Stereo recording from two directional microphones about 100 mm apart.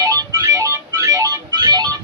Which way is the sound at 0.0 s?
35° right (ahead or behind).